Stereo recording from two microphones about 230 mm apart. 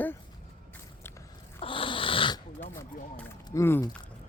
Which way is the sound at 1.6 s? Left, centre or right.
Left.